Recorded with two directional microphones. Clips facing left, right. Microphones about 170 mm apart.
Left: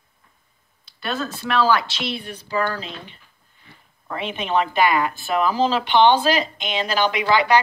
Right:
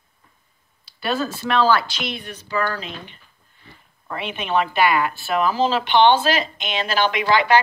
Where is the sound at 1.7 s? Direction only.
20° left (ahead or behind).